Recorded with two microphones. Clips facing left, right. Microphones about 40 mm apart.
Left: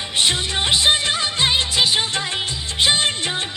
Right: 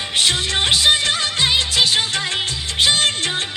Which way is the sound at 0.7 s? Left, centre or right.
Left.